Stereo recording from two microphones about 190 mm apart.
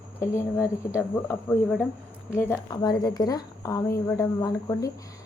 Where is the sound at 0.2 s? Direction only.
15° left (ahead or behind).